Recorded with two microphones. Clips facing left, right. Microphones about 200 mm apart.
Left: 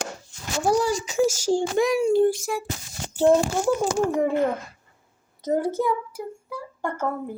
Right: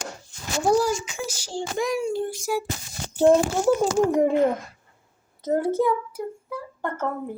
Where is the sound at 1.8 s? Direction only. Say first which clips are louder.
Left 4 dB; 65° left (ahead or behind).